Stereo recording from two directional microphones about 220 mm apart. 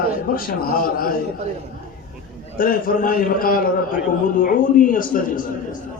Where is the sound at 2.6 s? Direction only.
40° left (ahead or behind).